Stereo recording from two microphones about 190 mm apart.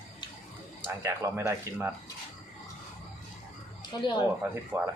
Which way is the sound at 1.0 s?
15° right (ahead or behind).